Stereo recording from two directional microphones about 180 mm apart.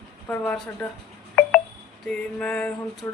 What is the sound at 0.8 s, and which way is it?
Speech, 5° left (ahead or behind).